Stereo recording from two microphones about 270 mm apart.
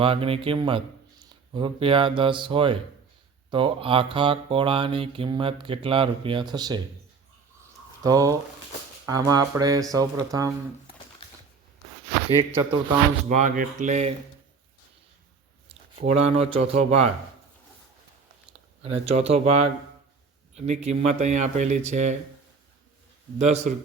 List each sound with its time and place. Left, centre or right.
0.0 s speech: right
7.6 s a sound: centre
9.0 s speech: centre
13.2 s speech: right
16.0 s speech: right
16.5 s speech: right
18.8 s speech: right
23.4 s speech: right